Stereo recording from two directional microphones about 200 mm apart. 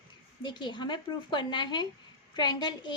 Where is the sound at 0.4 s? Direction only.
25° left (ahead or behind).